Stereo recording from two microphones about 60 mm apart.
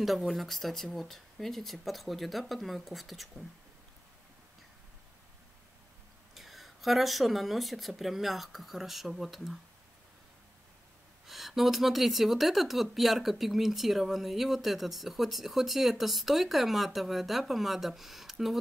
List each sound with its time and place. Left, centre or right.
0.0 s speech: centre
6.3 s speech: centre
11.2 s speech: centre